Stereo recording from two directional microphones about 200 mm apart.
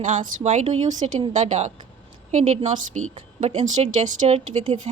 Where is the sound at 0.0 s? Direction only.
40° right (ahead or behind).